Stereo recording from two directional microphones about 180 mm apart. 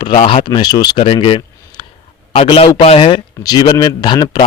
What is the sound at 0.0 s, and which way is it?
A man's voice, 30° left (ahead or behind).